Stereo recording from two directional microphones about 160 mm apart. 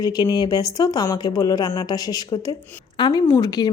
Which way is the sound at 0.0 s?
25° left (ahead or behind).